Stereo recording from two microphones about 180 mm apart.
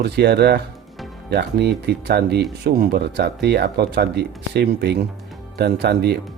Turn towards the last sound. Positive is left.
turn(degrees=-65)  # may be behind; listen again after turning